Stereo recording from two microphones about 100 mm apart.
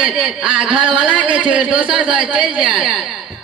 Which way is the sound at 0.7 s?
60° right (ahead or behind).